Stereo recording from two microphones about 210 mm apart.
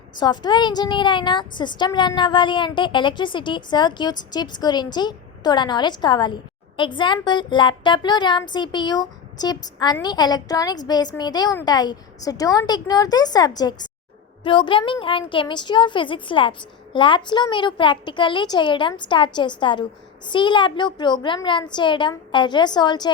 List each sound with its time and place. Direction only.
0.2 s a woman's voice: 20° left (ahead or behind)